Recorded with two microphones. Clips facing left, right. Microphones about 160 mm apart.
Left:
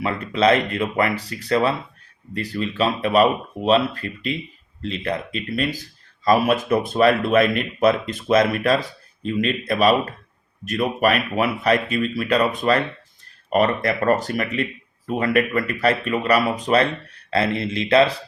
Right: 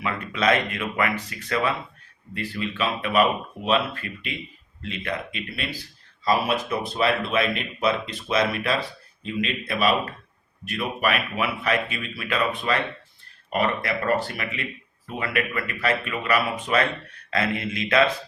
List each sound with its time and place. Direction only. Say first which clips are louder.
0.0 s speech: left 5 dB; 30° left (ahead or behind)